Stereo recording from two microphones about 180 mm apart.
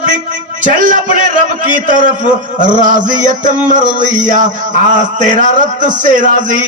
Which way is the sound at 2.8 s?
45° right (ahead or behind).